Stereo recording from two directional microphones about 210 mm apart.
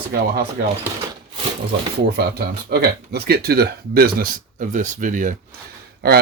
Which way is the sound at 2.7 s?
50° right (ahead or behind).